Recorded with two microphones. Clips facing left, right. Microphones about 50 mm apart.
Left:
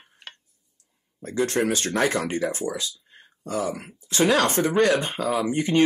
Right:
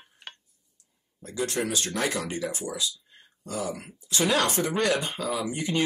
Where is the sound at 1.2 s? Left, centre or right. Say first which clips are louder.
Left 6 dB; left.